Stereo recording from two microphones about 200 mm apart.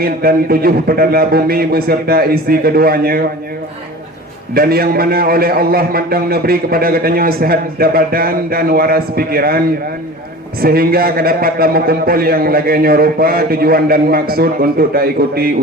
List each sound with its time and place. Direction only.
0.0 s a man's voice: 50° right (ahead or behind)
4.5 s a man's voice: 50° right (ahead or behind)
10.6 s a man's voice: 50° right (ahead or behind)